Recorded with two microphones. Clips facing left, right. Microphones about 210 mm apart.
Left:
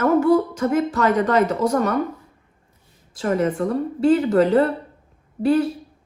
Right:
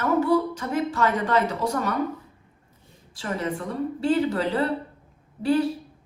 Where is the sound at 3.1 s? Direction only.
45° left (ahead or behind).